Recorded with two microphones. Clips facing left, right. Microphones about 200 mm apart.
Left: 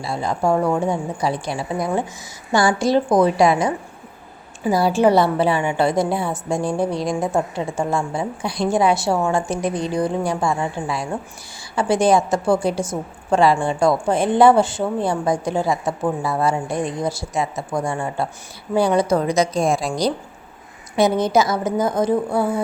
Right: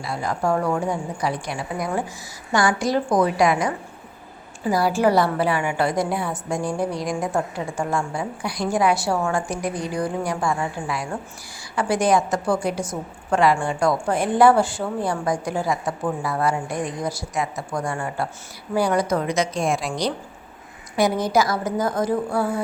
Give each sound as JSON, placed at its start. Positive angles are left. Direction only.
{"t": 0.0, "sound": "a woman's voice", "side_deg": 25}
{"t": 20.9, "sound": "a woman's voice", "side_deg": 25}